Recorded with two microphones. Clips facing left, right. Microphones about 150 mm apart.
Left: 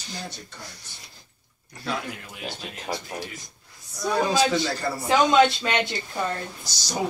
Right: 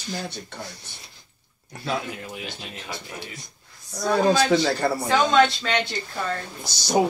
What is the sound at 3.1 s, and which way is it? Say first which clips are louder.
Speech: left 4 dB; 35° left (ahead or behind).